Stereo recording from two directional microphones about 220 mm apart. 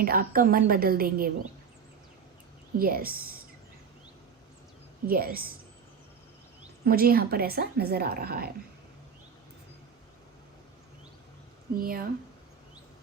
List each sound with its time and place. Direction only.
0.0 s a woman's voice: 40° right (ahead or behind)
2.7 s a woman's voice: 40° right (ahead or behind)
5.0 s speech: 40° right (ahead or behind)
6.8 s speech: 45° right (ahead or behind)
11.8 s a woman's voice: 40° right (ahead or behind)